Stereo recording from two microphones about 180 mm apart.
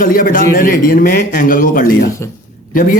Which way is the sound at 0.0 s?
50° left (ahead or behind).